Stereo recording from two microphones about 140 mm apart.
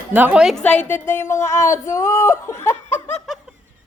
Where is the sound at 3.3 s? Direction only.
Centre (ahead or behind).